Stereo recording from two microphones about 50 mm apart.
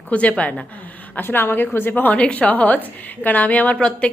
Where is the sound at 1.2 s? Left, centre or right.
Left.